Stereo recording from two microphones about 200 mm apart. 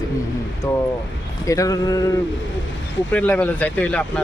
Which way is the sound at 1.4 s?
15° left (ahead or behind).